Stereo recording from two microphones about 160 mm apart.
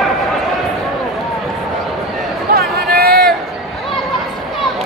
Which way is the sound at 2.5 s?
75° right (ahead or behind).